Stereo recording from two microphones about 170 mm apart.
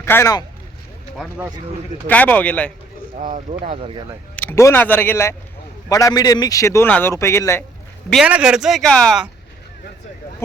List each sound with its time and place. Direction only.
0.0 s speech: 15° left (ahead or behind)
1.1 s speech: 5° right (ahead or behind)
2.0 s a man's voice: 10° left (ahead or behind)
3.2 s speech: 45° right (ahead or behind)
4.4 s a man's voice: 15° left (ahead or behind)
8.1 s speech: 5° right (ahead or behind)